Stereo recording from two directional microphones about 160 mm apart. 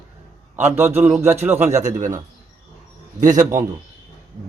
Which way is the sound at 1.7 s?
45° right (ahead or behind).